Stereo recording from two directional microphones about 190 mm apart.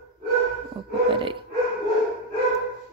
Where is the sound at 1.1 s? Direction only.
25° right (ahead or behind).